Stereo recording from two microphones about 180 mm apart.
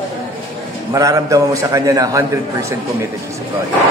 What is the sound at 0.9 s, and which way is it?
A man's voice, 20° right (ahead or behind).